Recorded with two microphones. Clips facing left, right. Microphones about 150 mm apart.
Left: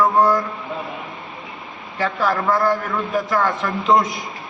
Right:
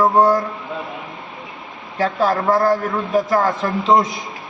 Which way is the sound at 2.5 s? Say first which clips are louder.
Right 3 dB; 25° right (ahead or behind).